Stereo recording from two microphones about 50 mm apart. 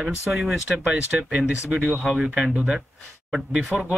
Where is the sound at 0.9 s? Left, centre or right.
Right.